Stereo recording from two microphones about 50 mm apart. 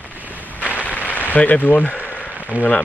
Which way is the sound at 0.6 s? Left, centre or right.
Left.